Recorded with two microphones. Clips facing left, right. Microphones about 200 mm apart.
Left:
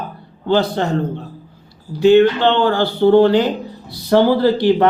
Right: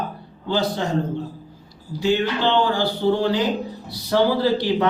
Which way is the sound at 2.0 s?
65° left (ahead or behind).